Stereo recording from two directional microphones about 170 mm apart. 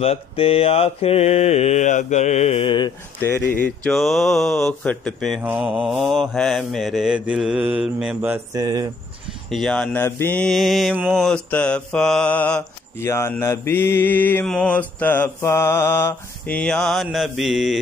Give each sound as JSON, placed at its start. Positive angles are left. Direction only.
{"t": 0.0, "sound": "mantra", "side_deg": 35}
{"t": 3.2, "sound": "mantra", "side_deg": 10}
{"t": 8.5, "sound": "speech", "side_deg": -25}
{"t": 9.5, "sound": "mantra", "side_deg": 0}
{"t": 10.0, "sound": "mantra", "side_deg": 15}